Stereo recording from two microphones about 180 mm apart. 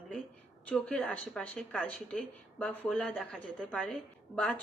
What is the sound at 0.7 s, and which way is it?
A woman's voice, 5° left (ahead or behind).